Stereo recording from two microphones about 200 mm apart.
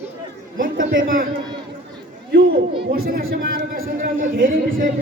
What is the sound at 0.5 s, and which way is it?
Chatter, 45° right (ahead or behind).